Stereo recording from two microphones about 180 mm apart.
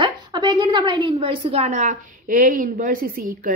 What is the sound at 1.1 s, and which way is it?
A woman's voice, 30° right (ahead or behind).